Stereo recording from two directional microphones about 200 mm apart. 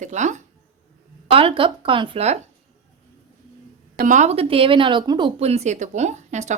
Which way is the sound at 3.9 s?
40° right (ahead or behind).